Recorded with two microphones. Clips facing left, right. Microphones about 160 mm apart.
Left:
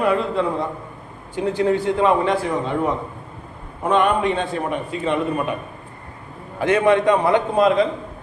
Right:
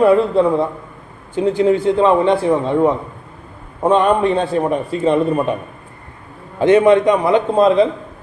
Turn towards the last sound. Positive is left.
turn(degrees=-25)  # may be behind; listen again after turning